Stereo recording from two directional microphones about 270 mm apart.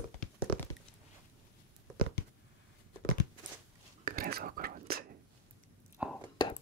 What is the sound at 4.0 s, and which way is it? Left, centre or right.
Whispering, right.